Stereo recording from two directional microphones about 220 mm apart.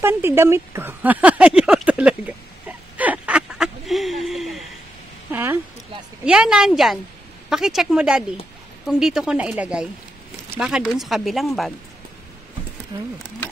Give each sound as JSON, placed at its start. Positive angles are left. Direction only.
{"t": 0.0, "sound": "a sound", "side_deg": -10}
{"t": 6.2, "sound": "speech", "side_deg": -5}
{"t": 12.9, "sound": "speech", "side_deg": -20}